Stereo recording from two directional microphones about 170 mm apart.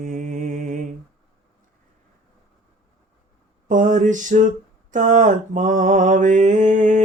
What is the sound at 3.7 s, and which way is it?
Mantra, 50° right (ahead or behind).